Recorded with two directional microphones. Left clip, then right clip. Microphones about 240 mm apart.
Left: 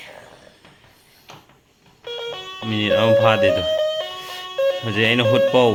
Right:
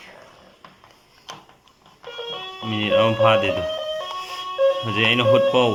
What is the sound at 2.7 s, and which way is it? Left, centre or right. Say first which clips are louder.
Speech: left 3 dB; centre.